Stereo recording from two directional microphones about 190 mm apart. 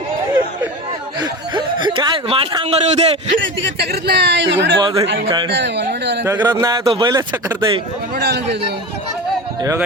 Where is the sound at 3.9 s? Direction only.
60° right (ahead or behind).